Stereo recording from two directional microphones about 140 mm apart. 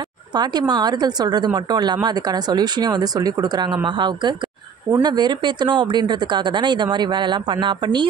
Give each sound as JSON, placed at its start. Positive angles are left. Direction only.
{"t": 0.3, "sound": "a woman's voice", "side_deg": -30}